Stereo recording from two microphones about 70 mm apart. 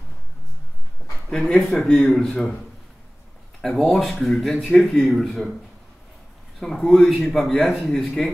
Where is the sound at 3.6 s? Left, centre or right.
Centre.